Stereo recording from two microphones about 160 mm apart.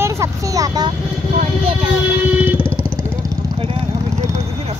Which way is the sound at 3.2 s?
35° right (ahead or behind).